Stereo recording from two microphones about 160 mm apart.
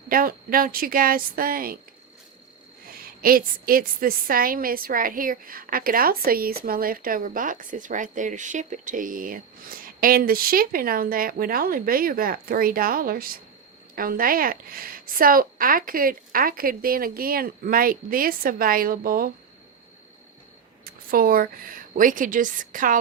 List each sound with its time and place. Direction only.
0.1 s a woman's voice: 60° right (ahead or behind)
2.8 s a woman's voice: 65° right (ahead or behind)
20.8 s a woman's voice: 65° right (ahead or behind)